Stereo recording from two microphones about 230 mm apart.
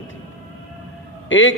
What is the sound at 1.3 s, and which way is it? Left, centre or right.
Speech, left.